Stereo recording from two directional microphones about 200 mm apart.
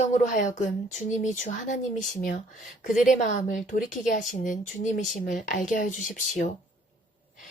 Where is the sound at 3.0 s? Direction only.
40° left (ahead or behind).